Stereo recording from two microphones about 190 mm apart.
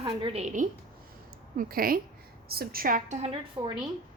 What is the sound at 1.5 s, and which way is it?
Speech, 50° right (ahead or behind).